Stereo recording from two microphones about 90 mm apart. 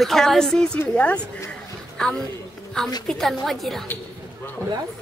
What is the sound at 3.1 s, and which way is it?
Speech, 5° left (ahead or behind).